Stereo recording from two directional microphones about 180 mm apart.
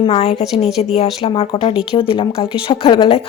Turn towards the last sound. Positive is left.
turn(degrees=30)  # may be behind; listen again after turning